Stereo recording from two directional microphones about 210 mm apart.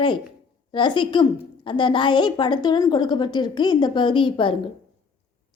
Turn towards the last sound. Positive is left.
turn(degrees=25)  # may be behind; listen again after turning